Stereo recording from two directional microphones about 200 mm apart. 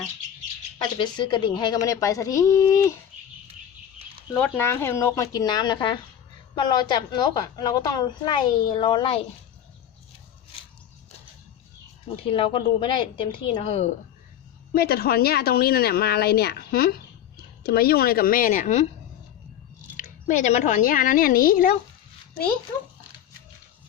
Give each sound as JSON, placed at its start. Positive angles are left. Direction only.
{"t": 0.9, "sound": "a woman's voice", "side_deg": 20}
{"t": 4.4, "sound": "a woman's voice", "side_deg": 10}
{"t": 12.0, "sound": "a woman's voice", "side_deg": 25}
{"t": 14.8, "sound": "speech", "side_deg": 50}
{"t": 20.0, "sound": "speech", "side_deg": 40}